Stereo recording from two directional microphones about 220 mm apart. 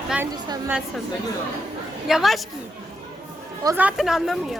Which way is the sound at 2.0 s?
Centre (ahead or behind).